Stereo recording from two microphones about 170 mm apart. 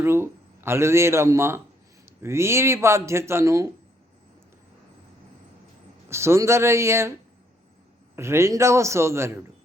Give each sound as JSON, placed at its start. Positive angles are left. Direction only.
{"t": 0.0, "sound": "speech", "side_deg": -15}
{"t": 6.1, "sound": "speech", "side_deg": -15}
{"t": 8.1, "sound": "speech", "side_deg": -15}